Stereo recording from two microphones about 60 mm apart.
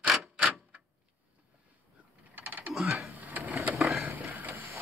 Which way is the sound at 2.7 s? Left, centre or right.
Centre.